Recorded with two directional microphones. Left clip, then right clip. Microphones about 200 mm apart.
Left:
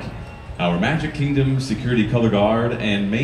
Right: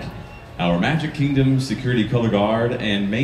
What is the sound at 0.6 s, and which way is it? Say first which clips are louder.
Speech: even; 30° right (ahead or behind).